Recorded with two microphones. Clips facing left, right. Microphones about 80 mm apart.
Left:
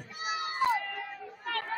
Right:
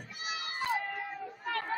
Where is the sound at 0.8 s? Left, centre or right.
Centre.